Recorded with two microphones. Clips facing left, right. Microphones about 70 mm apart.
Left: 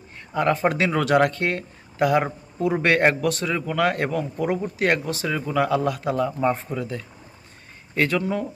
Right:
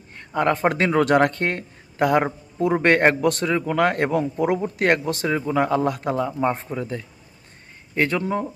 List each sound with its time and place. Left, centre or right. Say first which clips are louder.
0.3 s a man's voice: right 1 dB; right